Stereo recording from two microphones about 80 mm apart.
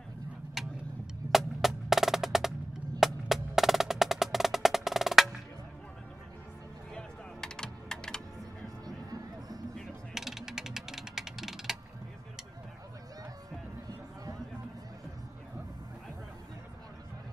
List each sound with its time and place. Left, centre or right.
0.6 s tick-tock: centre
1.3 s percussion: centre
6.9 s typing: centre
8.8 s music: right
10.1 s a sound: centre